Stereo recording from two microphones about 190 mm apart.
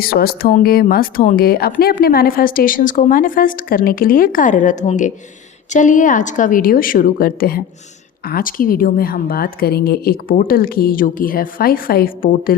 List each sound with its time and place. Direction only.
0.0 s a woman's voice: 50° left (ahead or behind)